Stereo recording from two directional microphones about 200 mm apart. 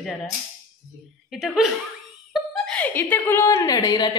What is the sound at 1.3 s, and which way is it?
Speech, centre (ahead or behind).